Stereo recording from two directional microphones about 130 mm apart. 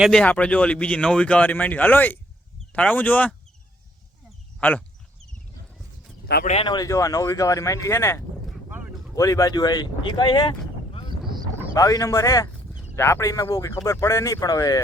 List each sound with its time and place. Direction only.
0.0 s speech: 5° left (ahead or behind)
4.6 s speech: 15° left (ahead or behind)
6.6 s speech: 35° left (ahead or behind)
6.8 s speech: 25° left (ahead or behind)
11.7 s speech: 25° left (ahead or behind)